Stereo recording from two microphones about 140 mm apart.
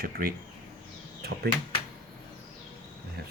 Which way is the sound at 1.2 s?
90° right.